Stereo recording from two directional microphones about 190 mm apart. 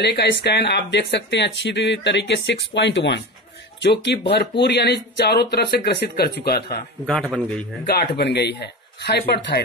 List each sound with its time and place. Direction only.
0.0 s speech: 60° left (ahead or behind)
7.3 s a man's voice: 5° left (ahead or behind)
7.9 s speech: 60° left (ahead or behind)